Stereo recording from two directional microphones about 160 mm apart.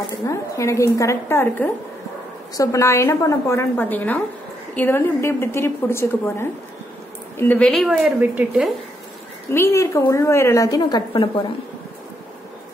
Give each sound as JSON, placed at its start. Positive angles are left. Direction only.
{"t": 0.1, "sound": "a woman's voice", "side_deg": 20}
{"t": 9.5, "sound": "a woman's voice", "side_deg": 15}